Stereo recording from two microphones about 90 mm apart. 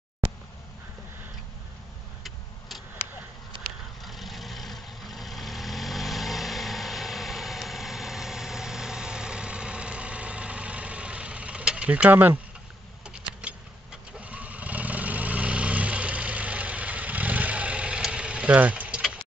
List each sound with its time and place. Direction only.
4.0 s vehicle: centre (ahead or behind); by 12.4 s 20° right (ahead or behind)
13.4 s a sound: 10° right (ahead or behind)
14.1 s vehicle: 15° right (ahead or behind)